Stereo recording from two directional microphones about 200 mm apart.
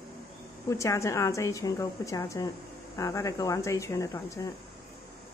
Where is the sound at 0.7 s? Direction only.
15° left (ahead or behind).